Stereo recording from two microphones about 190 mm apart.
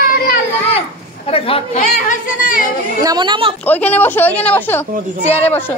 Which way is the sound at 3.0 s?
25° right (ahead or behind).